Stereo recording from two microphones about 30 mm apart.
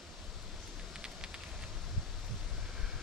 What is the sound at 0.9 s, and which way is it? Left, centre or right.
Vehicle, right.